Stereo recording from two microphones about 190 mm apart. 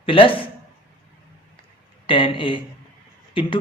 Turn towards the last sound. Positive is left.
turn(degrees=25)  # may be behind; listen again after turning